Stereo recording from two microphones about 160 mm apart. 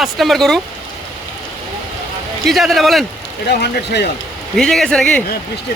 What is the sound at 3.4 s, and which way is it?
Speech, 90° left.